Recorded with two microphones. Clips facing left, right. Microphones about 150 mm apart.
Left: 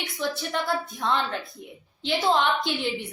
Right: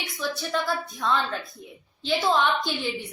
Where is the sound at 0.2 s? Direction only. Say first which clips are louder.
Even; 20° left (ahead or behind).